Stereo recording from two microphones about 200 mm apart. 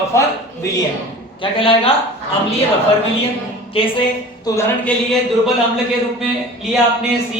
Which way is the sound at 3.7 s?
25° left (ahead or behind).